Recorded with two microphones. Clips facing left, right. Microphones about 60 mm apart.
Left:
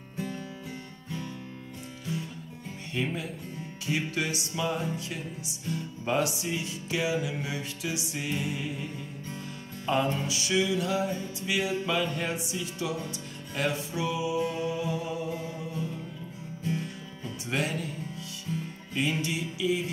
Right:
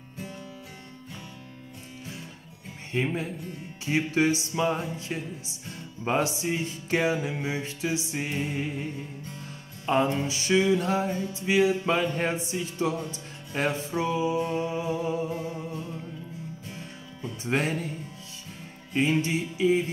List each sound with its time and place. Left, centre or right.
2.9 s music: right
9.8 s music: right
17.5 s music: right
18.9 s music: right